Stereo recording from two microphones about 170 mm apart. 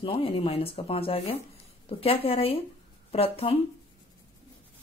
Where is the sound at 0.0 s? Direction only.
35° left (ahead or behind).